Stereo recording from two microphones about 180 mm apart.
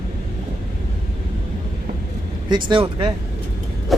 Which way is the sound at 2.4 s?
25° right (ahead or behind).